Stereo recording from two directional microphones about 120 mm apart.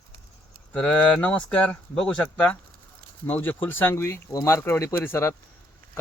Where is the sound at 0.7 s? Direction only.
10° left (ahead or behind).